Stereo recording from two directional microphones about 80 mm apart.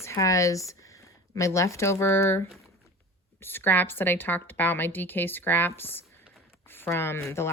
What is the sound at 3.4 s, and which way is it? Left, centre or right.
A woman's voice, left.